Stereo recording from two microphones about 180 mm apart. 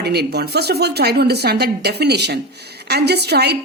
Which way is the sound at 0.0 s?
65° right (ahead or behind).